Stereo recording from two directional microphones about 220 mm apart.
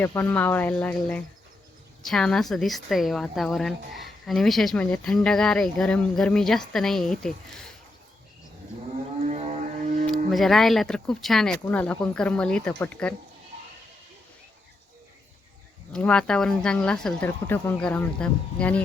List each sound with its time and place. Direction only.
0.0 s a woman's voice: 10° left (ahead or behind)
9.3 s a sound: 30° right (ahead or behind)
10.3 s a woman's voice: centre (ahead or behind)
15.9 s a woman's voice: 5° left (ahead or behind)